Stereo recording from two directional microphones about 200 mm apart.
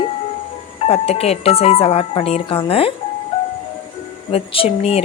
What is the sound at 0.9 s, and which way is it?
Speech, 30° left (ahead or behind).